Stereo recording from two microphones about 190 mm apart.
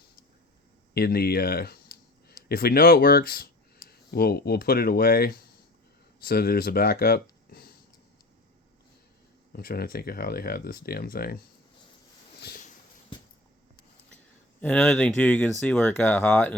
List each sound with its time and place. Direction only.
0.9 s speech: 55° left (ahead or behind)
9.5 s speech: 55° left (ahead or behind)
12.4 s a sound: 55° left (ahead or behind)
14.6 s speech: 10° left (ahead or behind)